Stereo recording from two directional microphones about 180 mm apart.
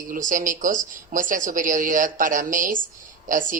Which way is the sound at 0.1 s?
50° right (ahead or behind).